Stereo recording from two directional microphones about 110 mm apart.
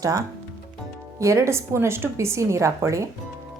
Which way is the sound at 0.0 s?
30° right (ahead or behind).